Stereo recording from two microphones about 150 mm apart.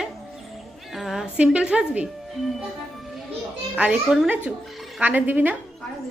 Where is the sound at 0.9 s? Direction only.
Centre (ahead or behind).